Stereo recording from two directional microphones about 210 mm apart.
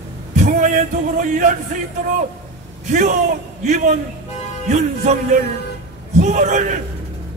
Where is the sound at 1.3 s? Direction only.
35° right (ahead or behind).